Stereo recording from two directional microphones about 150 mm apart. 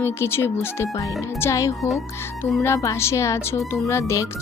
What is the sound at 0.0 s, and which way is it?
Speech, 15° left (ahead or behind).